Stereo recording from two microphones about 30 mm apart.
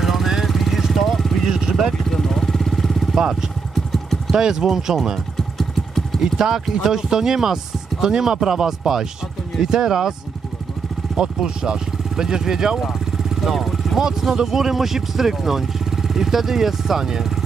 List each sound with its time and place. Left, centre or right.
0.0 s vehicle: centre
1.4 s vehicle: right
2.0 s vehicle: centre
3.2 s speech: centre
5.6 s vehicle: centre
6.2 s speech: centre
11.1 s speech: right
12.8 s vehicle: centre
13.9 s speech: centre